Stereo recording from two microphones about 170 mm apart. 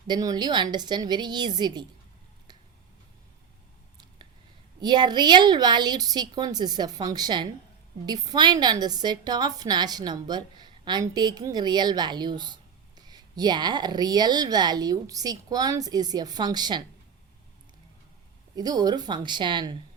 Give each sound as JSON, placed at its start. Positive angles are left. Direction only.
{"t": 0.1, "sound": "a woman's voice", "side_deg": -25}
{"t": 4.8, "sound": "a woman's voice", "side_deg": -25}
{"t": 18.5, "sound": "a woman's voice", "side_deg": -25}